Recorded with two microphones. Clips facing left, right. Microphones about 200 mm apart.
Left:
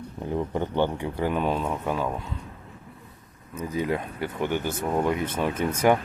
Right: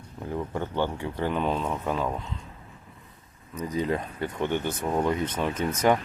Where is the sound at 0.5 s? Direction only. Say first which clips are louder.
Left 3 dB; 15° left (ahead or behind).